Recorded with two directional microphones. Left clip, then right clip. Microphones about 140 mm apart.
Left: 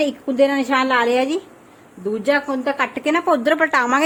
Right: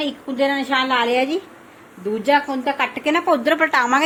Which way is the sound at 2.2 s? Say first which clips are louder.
Right 1 dB; 40° left (ahead or behind).